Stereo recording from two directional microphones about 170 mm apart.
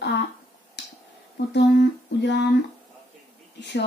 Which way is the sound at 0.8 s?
90° left.